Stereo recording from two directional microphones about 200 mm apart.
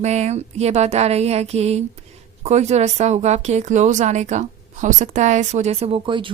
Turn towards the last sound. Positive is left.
turn(degrees=-25)  # may be behind; listen again after turning